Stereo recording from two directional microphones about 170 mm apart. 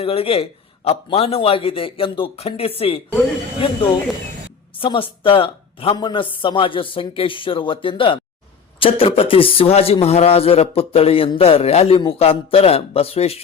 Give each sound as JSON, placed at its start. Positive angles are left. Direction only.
{"t": 0.0, "sound": "speech", "side_deg": 35}
{"t": 4.8, "sound": "speech", "side_deg": 30}